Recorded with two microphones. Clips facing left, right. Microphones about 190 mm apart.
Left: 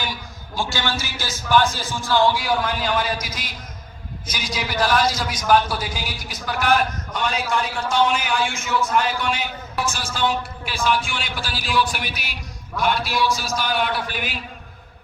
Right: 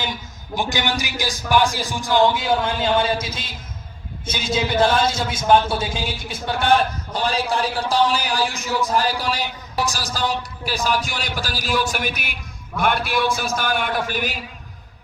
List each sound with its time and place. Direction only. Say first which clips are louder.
0.0 s a man's voice: right 1 dB; 20° right (ahead or behind); by 14.3 s 45° right (ahead or behind)